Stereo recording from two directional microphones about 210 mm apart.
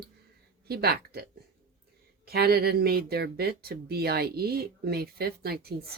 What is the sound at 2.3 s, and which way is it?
Speech, 50° right (ahead or behind).